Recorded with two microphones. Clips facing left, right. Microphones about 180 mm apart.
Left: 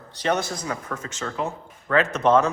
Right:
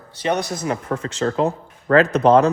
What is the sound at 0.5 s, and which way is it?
Speech, 25° right (ahead or behind).